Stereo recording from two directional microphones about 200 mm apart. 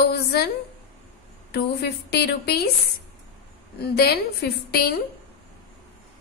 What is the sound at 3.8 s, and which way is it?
A woman's voice, 55° left (ahead or behind).